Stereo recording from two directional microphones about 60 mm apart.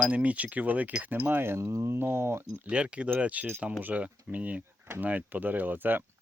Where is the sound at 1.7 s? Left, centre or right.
Right.